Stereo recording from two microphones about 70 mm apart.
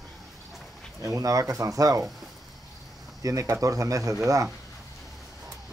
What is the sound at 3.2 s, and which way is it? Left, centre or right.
Speech, right.